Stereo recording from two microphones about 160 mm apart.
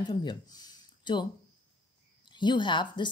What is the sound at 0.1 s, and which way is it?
Speech, 30° left (ahead or behind).